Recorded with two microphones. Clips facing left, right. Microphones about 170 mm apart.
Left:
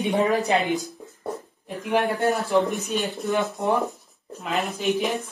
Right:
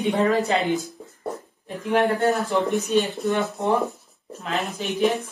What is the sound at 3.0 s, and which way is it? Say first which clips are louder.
A woman's voice: even; centre (ahead or behind).